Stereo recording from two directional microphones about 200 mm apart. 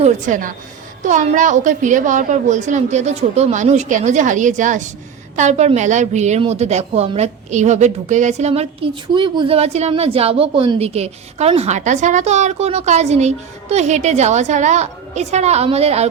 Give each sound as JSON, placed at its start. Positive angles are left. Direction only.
{"t": 0.0, "sound": "a woman's voice", "side_deg": -40}